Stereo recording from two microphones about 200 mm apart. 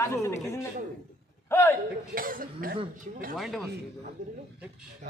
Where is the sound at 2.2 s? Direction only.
45° right (ahead or behind).